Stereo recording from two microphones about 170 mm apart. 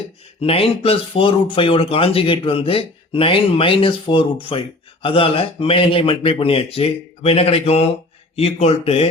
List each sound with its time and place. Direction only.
0.4 s speech: 35° left (ahead or behind)